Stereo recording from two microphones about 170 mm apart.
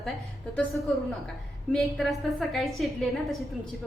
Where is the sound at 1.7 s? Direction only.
Centre (ahead or behind).